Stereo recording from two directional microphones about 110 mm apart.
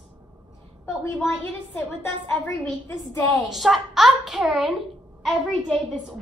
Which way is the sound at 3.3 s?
Centre (ahead or behind).